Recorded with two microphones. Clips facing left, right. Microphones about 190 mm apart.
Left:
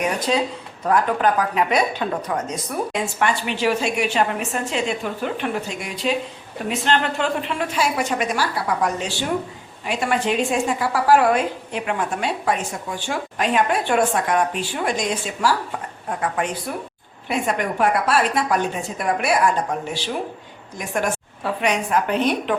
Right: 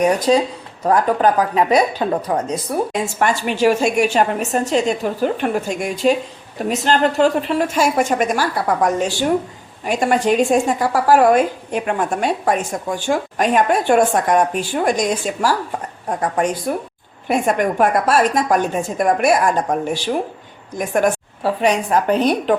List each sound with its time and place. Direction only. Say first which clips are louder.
0.0 s a woman's voice: right 6 dB; 40° right (ahead or behind)
20.7 s a woman's voice: right 7 dB; 50° right (ahead or behind)
21.4 s speech: right 5 dB; 35° right (ahead or behind)